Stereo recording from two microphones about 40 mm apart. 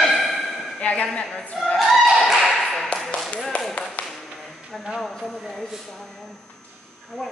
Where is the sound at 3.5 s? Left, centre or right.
Left.